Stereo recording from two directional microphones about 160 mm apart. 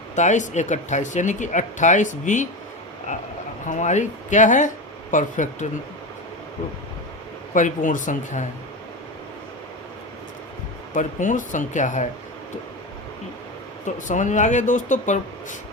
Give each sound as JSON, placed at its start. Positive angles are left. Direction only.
{"t": 0.2, "sound": "speech", "side_deg": 50}
{"t": 7.5, "sound": "speech", "side_deg": 55}
{"t": 10.9, "sound": "speech", "side_deg": 55}
{"t": 13.8, "sound": "speech", "side_deg": 50}